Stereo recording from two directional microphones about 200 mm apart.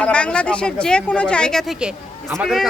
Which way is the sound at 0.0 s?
5° left (ahead or behind).